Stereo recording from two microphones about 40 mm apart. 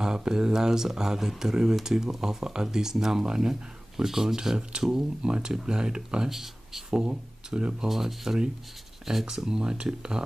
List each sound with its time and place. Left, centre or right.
0.0 s speech: centre
6.3 s speech: centre
7.1 s speech: right
7.9 s speech: centre